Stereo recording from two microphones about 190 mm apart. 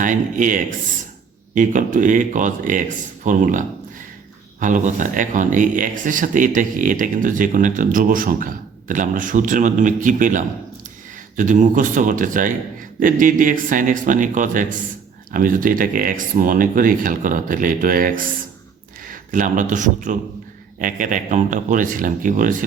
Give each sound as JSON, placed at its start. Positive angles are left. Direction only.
{"t": 0.0, "sound": "speech", "side_deg": -45}
{"t": 4.6, "sound": "speech", "side_deg": -40}